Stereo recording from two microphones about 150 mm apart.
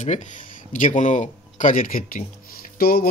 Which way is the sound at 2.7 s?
90° left.